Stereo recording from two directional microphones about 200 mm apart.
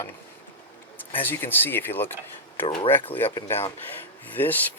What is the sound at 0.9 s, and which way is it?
Speech, 10° left (ahead or behind).